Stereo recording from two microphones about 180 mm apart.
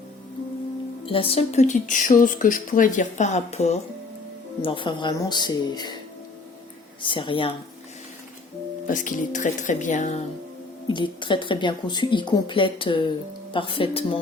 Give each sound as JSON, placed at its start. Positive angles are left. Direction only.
{"t": 1.0, "sound": "speech", "side_deg": 30}
{"t": 4.6, "sound": "speech", "side_deg": 30}
{"t": 7.0, "sound": "speech", "side_deg": 25}
{"t": 8.9, "sound": "speech", "side_deg": 45}
{"t": 10.8, "sound": "speech", "side_deg": 25}